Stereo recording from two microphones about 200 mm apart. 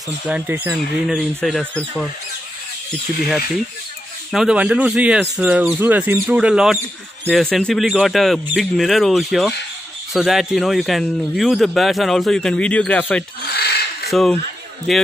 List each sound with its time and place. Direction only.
0.3 s speech: 10° right (ahead or behind)
4.3 s speech: 5° right (ahead or behind)
13.5 s a sound: 55° left (ahead or behind)